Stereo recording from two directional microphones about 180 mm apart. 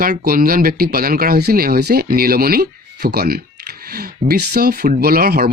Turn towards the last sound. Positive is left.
turn(degrees=-55)  # may be behind; listen again after turning